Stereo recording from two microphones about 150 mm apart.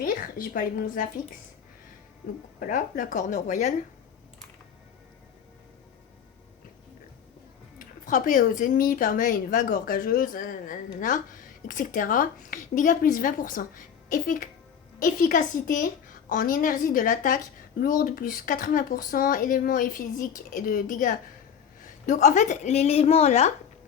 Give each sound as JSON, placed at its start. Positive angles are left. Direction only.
{"t": 0.0, "sound": "a woman's voice", "side_deg": 70}
{"t": 2.6, "sound": "a woman's voice", "side_deg": 65}
{"t": 7.8, "sound": "a woman's voice", "side_deg": 60}